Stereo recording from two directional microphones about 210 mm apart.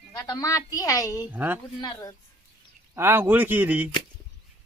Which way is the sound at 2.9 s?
10° right (ahead or behind).